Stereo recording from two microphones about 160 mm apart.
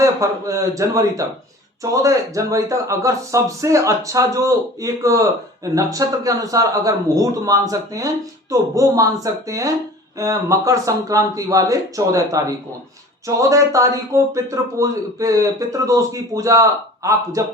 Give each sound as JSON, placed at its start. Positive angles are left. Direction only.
{"t": 0.0, "sound": "a man's voice", "side_deg": -20}